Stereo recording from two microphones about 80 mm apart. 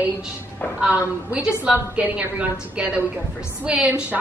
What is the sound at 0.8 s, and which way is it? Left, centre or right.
A woman's voice, centre.